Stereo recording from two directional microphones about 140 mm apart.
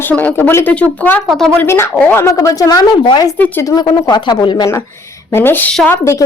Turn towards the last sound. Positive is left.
turn(degrees=20)  # may be behind; listen again after turning